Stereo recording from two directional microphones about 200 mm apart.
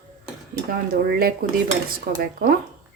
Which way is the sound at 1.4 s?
45° right (ahead or behind).